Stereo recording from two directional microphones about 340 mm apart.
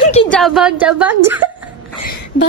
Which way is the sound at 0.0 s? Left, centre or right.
Centre.